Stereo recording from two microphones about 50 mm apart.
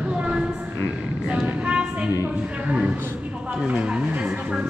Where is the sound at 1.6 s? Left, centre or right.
Right.